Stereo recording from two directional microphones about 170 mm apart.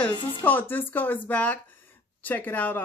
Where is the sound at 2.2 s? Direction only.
10° left (ahead or behind).